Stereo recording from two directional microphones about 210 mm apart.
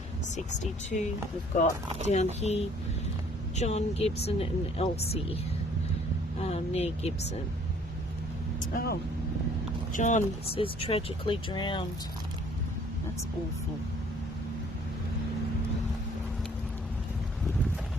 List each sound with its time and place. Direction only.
0.3 s speech: 35° left (ahead or behind)
2.0 s speech: 30° left (ahead or behind)
6.4 s speech: 30° left (ahead or behind)
8.7 s speech: 45° left (ahead or behind)
9.9 s speech: 35° left (ahead or behind)